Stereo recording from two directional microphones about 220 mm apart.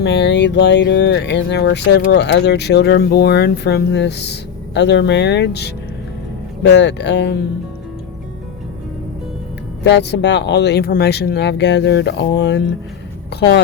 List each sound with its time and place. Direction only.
0.0 s speech: 50° left (ahead or behind)
9.8 s speech: 50° left (ahead or behind)